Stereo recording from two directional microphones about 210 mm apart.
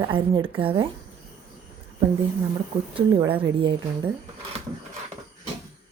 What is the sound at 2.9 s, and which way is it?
Speech, 25° right (ahead or behind).